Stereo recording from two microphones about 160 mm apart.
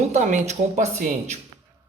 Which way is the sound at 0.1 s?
50° right (ahead or behind).